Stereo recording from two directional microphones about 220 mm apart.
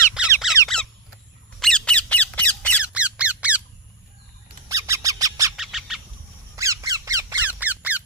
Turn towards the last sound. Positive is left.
turn(degrees=-5)  # may be behind; listen again after turning